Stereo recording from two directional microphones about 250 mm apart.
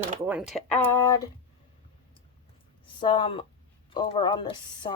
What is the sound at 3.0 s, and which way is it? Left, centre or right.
A woman's voice, centre.